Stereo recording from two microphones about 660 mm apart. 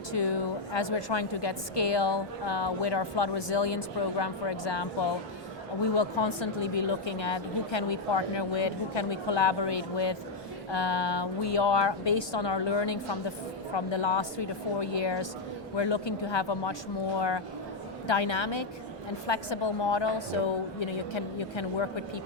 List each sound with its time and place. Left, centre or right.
0.2 s a woman's voice: left